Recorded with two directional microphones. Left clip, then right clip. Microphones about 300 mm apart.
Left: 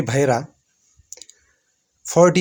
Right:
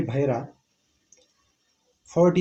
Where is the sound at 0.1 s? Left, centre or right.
Left.